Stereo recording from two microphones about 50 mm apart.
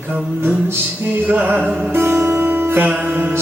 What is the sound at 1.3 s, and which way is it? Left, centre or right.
Music, right.